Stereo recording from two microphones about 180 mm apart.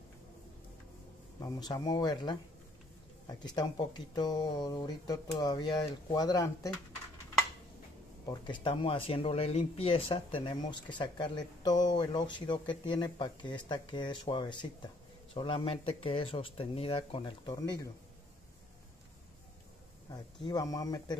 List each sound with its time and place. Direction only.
1.4 s speech: 20° left (ahead or behind)
8.3 s speech: 25° left (ahead or behind)
20.1 s speech: 20° left (ahead or behind)